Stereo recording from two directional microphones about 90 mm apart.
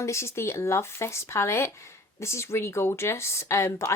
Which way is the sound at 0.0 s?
30° left (ahead or behind).